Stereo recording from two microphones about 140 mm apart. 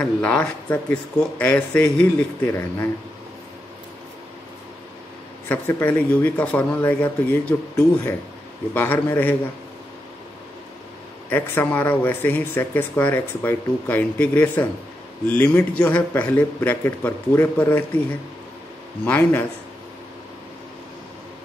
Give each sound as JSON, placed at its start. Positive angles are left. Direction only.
{"t": 0.0, "sound": "speech", "side_deg": 10}
{"t": 5.5, "sound": "speech", "side_deg": 15}
{"t": 8.7, "sound": "speech", "side_deg": 15}
{"t": 11.2, "sound": "speech", "side_deg": 15}
{"t": 19.0, "sound": "speech", "side_deg": 10}